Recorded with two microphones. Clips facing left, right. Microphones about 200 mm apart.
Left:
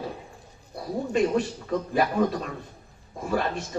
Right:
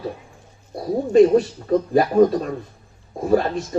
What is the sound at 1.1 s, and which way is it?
Speech, 40° right (ahead or behind).